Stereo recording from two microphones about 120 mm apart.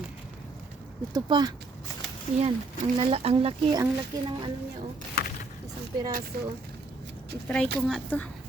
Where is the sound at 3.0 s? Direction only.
50° right (ahead or behind).